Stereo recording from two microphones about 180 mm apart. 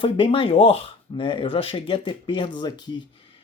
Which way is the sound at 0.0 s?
30° left (ahead or behind).